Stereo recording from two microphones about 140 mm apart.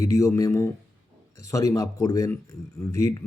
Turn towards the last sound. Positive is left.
turn(degrees=25)  # may be behind; listen again after turning